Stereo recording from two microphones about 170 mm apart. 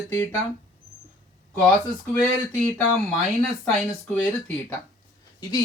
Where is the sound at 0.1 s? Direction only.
10° left (ahead or behind).